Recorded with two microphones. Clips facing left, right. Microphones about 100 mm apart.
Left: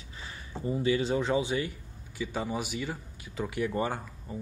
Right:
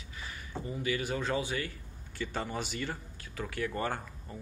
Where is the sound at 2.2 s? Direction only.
5° left (ahead or behind).